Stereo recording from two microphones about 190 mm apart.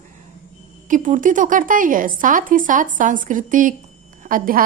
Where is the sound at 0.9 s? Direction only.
40° right (ahead or behind).